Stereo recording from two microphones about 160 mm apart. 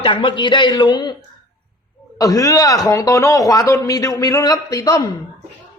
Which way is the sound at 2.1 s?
20° left (ahead or behind).